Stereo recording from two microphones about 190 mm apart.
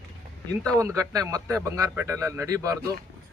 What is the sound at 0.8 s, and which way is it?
Speech, 15° right (ahead or behind).